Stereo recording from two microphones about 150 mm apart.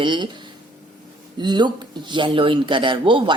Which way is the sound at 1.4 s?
30° right (ahead or behind).